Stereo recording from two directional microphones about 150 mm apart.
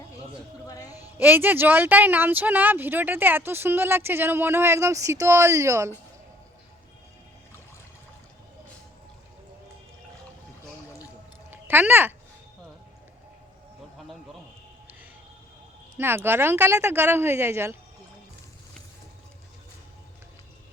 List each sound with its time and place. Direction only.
0.9 s speech: 15° right (ahead or behind)
11.5 s speech: 15° right (ahead or behind)
16.0 s speech: 15° right (ahead or behind)